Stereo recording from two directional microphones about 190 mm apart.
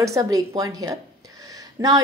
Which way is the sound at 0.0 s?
15° right (ahead or behind).